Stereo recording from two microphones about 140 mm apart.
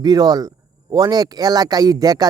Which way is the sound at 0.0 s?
30° right (ahead or behind).